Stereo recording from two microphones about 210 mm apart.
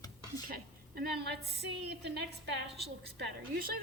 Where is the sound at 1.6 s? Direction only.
55° right (ahead or behind).